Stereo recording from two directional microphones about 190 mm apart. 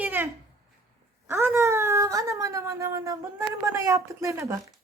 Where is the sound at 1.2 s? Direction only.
15° right (ahead or behind).